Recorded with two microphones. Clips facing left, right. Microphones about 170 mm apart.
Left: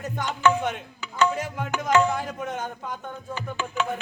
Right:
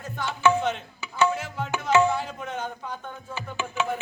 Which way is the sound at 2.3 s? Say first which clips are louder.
Left 2 dB; 10° left (ahead or behind).